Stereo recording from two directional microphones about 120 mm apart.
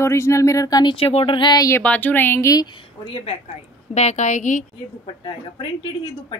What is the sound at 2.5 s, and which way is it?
Speech, 40° left (ahead or behind).